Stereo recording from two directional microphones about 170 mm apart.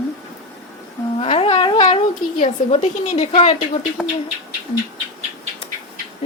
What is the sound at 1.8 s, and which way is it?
Speech, 35° left (ahead or behind).